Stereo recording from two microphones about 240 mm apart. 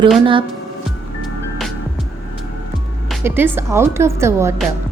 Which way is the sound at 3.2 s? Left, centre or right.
Centre.